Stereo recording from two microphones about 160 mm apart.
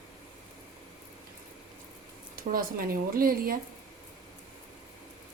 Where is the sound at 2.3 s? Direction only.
65° right (ahead or behind).